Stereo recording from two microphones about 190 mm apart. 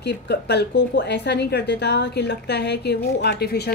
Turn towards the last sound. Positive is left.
turn(degrees=60)  # may be behind; listen again after turning